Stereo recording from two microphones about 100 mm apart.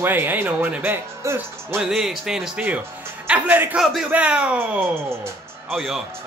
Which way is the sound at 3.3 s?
15° right (ahead or behind).